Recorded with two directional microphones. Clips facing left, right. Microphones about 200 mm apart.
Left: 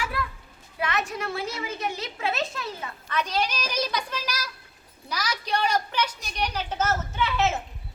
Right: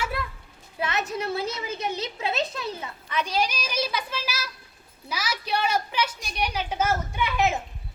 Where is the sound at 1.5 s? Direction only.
20° right (ahead or behind).